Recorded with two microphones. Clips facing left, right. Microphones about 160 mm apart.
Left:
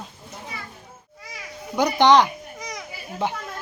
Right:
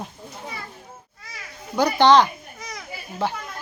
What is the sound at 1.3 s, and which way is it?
Babbling, 15° left (ahead or behind).